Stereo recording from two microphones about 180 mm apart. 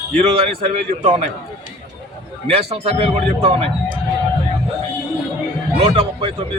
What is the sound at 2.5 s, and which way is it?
Speech, 35° right (ahead or behind).